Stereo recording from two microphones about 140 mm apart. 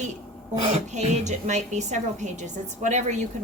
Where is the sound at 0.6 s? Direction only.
55° right (ahead or behind).